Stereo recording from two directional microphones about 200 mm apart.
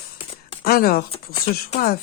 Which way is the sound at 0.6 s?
50° left (ahead or behind).